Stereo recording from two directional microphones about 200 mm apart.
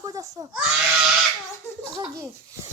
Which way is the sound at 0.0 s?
20° right (ahead or behind).